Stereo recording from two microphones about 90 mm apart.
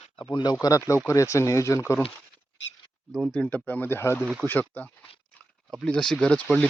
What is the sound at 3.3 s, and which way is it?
Speech, 10° left (ahead or behind).